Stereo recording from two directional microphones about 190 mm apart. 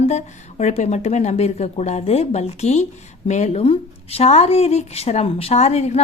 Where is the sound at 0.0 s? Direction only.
35° left (ahead or behind).